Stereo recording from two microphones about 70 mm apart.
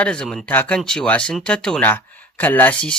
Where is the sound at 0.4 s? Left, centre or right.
Left.